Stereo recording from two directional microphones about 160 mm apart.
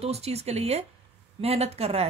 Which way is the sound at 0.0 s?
40° right (ahead or behind).